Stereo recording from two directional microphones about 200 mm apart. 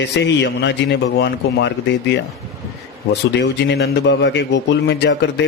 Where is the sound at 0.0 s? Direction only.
60° left (ahead or behind).